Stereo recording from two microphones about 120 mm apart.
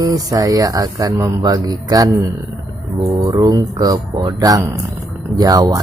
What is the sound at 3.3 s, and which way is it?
Speech, 30° right (ahead or behind).